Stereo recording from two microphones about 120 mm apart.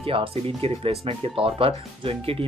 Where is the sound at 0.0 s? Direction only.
50° right (ahead or behind).